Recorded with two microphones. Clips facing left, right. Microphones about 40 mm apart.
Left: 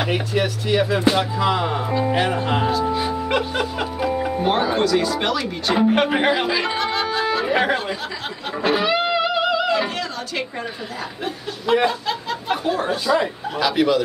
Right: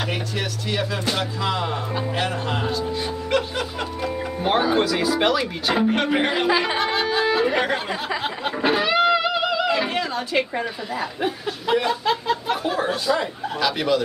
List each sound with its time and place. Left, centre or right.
0.0 s speech: centre
2.0 s speech: left; by 7.5 s centre
8.7 s music: centre
11.9 s a sound: centre
12.6 s speech: centre